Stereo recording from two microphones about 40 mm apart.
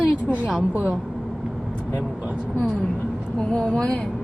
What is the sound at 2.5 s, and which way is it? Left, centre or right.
A woman's voice, left.